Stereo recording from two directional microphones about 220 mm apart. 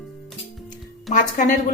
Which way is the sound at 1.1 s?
35° left (ahead or behind).